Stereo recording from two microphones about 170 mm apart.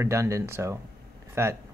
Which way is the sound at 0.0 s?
15° right (ahead or behind).